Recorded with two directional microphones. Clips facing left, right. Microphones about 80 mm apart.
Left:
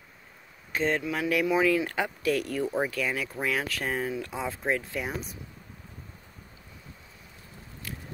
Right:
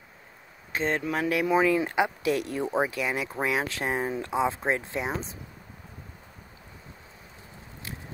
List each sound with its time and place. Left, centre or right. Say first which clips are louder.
0.7 s speech: even; right